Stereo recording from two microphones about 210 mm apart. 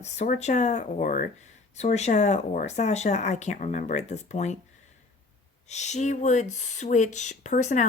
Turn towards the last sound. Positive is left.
turn(degrees=35)  # may be behind; listen again after turning